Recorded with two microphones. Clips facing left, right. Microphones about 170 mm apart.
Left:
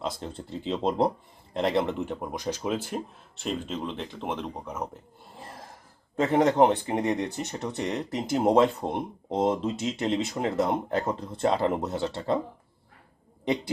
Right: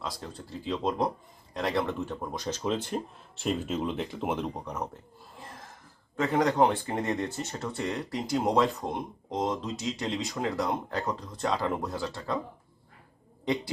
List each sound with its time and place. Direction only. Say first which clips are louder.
0.0 s speech: left 4 dB; 25° left (ahead or behind); by 4.9 s 5° left (ahead or behind)
6.1 s speech: left 4 dB; 25° left (ahead or behind)